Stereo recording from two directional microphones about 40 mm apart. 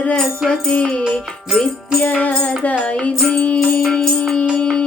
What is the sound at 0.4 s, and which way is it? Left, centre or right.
Music, centre.